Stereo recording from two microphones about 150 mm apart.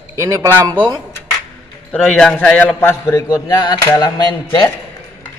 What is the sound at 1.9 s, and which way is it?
Speech, 10° left (ahead or behind).